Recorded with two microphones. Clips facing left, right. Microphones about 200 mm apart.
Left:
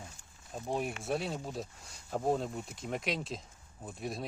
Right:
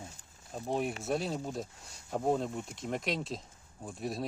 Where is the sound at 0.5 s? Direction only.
Centre (ahead or behind).